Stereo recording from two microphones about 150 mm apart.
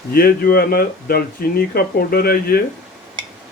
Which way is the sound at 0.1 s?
85° left.